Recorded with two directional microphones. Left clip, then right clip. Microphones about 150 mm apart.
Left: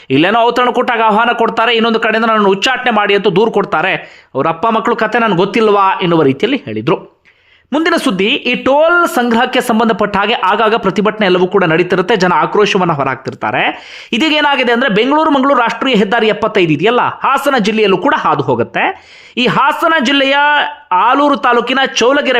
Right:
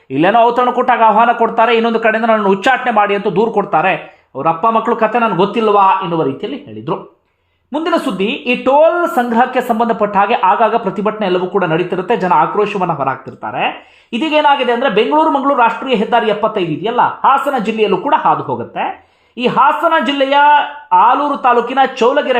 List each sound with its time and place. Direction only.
0.1 s a man's voice: 30° left (ahead or behind)
5.4 s speech: 40° left (ahead or behind)
7.7 s speech: 35° left (ahead or behind)
21.4 s speech: 30° left (ahead or behind)